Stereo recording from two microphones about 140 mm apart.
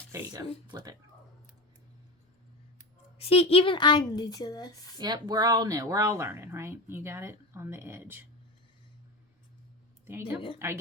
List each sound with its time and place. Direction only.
0.1 s speech: 25° right (ahead or behind)
3.2 s speech: 45° left (ahead or behind); by 4.7 s 25° left (ahead or behind)
4.9 s speech: 30° right (ahead or behind)
10.1 s speech: 15° right (ahead or behind)